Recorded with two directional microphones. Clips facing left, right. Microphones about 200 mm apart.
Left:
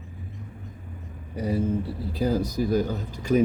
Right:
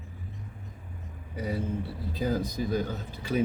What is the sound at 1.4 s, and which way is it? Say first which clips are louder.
Speech: left 6 dB; 10° left (ahead or behind).